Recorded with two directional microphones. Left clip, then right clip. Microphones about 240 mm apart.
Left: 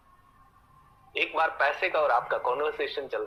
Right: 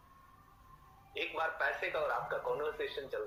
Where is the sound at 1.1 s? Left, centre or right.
Left.